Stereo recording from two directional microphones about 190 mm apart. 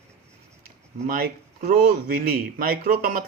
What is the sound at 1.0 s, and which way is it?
Speech, 50° right (ahead or behind).